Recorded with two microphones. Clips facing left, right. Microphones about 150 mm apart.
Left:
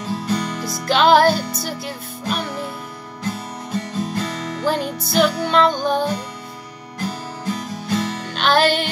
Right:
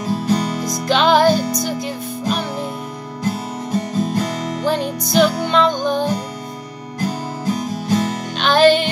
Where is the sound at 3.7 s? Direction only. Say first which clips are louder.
Right 5 dB; 40° right (ahead or behind).